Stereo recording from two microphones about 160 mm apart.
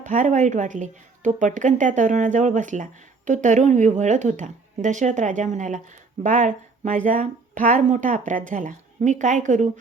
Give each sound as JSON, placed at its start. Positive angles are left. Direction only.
{"t": 0.0, "sound": "a woman's voice", "side_deg": -50}